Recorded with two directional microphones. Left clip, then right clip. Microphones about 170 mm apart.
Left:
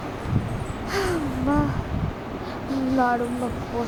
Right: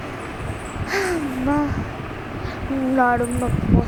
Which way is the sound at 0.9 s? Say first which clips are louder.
Right 3 dB; 15° right (ahead or behind).